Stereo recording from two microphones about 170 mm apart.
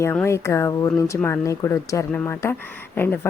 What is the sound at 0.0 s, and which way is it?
A woman's voice, 15° left (ahead or behind).